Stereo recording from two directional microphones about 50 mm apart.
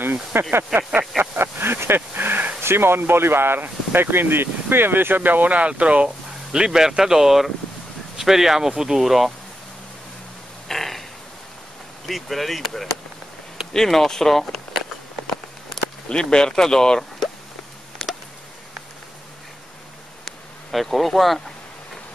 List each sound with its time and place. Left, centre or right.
0.0 s speech: right
1.1 s a sound: right
1.4 s speech: right
2.0 s speech: right
2.6 s speech: right; by 9.3 s centre
10.7 s a sound: centre
12.1 s speech: centre
16.1 s speech: centre
18.0 s a sound: centre
20.2 s bee: centre